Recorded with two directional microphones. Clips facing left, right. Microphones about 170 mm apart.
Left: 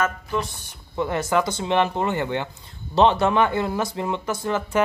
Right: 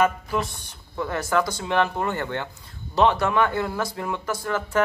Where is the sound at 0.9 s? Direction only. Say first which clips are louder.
Left 2 dB; 20° left (ahead or behind).